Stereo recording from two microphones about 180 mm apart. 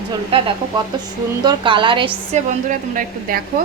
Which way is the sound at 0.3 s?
30° right (ahead or behind).